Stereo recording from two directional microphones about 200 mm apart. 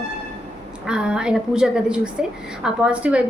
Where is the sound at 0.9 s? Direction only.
5° right (ahead or behind).